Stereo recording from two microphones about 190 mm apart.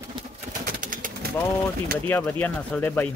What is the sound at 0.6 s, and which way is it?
Pigeon, 45° right (ahead or behind).